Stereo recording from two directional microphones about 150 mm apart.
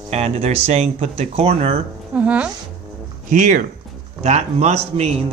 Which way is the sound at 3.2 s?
60° right (ahead or behind).